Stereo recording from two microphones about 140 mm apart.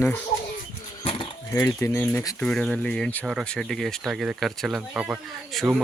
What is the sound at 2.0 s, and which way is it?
Speech, 10° left (ahead or behind).